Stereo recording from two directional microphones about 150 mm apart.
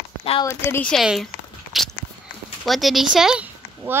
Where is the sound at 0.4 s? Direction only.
15° left (ahead or behind).